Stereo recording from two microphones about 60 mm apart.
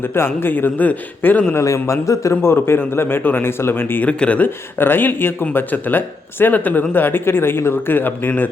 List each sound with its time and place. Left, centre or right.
0.0 s speech: left
1.5 s a man's voice: left
2.4 s speech: left
4.0 s speech: left
4.4 s speech: left